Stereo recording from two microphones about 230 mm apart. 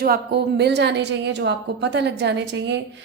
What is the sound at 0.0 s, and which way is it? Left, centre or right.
A woman's voice, right.